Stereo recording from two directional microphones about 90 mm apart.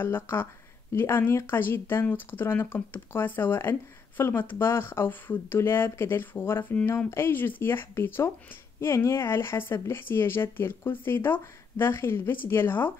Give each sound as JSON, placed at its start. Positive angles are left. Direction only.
{"t": 0.0, "sound": "speech", "side_deg": 25}